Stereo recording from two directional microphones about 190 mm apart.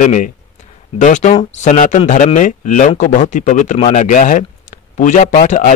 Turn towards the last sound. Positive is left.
turn(degrees=40)  # may be behind; listen again after turning